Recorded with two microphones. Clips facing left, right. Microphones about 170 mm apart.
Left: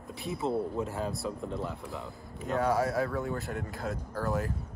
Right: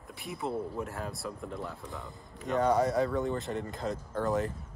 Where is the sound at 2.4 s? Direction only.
Centre (ahead or behind).